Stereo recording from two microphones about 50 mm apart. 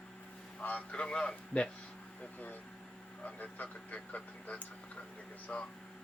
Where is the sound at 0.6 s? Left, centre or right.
Left.